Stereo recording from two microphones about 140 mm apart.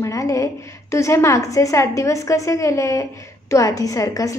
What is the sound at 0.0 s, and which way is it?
A woman's voice, 25° left (ahead or behind).